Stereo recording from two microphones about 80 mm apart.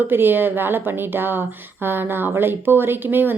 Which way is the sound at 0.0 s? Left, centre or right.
Right.